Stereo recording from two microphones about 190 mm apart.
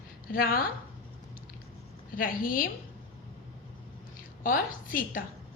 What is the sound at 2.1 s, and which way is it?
Speech, 45° left (ahead or behind).